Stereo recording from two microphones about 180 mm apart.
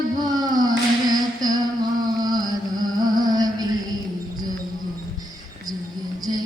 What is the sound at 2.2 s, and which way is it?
Music, 20° right (ahead or behind).